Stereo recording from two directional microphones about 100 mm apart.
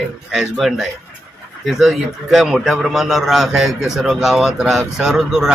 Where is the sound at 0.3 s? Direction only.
5° right (ahead or behind).